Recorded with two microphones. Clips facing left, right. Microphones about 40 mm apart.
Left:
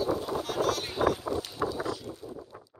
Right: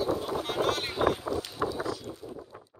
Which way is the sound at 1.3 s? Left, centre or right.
Left.